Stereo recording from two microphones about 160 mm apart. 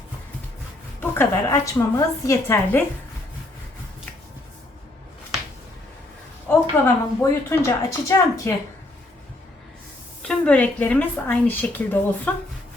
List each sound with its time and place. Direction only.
0.9 s a woman's voice: 20° left (ahead or behind)
6.5 s a woman's voice: 15° left (ahead or behind)
10.2 s a woman's voice: 5° left (ahead or behind)